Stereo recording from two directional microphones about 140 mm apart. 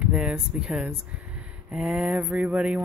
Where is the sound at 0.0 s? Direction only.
5° right (ahead or behind).